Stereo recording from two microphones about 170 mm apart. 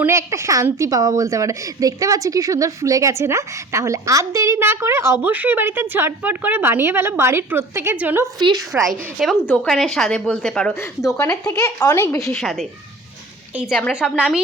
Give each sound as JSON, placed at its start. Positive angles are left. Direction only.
{"t": 0.0, "sound": "a woman's voice", "side_deg": -15}
{"t": 11.0, "sound": "speech", "side_deg": 20}
{"t": 12.3, "sound": "a woman's voice", "side_deg": 0}
{"t": 13.9, "sound": "a woman's voice", "side_deg": 0}